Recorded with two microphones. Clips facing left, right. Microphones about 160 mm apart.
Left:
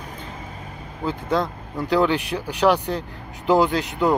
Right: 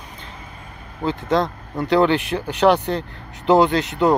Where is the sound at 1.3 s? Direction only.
10° left (ahead or behind).